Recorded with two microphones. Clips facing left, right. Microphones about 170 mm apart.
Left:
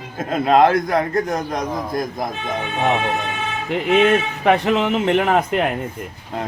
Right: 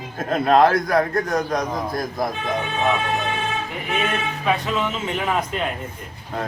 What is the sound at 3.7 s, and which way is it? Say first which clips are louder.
A man's voice: left 15 dB; 80° left.